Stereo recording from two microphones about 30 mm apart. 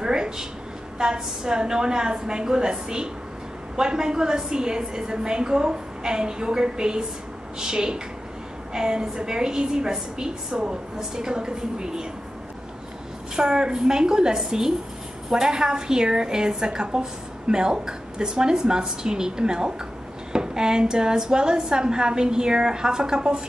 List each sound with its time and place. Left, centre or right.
0.0 s a sound: right
0.9 s a woman's voice: right
13.4 s a woman's voice: right